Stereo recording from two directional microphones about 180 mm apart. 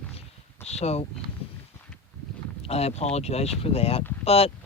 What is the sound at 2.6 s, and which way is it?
Speech, 35° left (ahead or behind).